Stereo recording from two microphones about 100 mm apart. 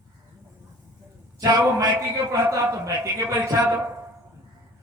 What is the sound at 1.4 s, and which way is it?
A man's voice, 35° right (ahead or behind).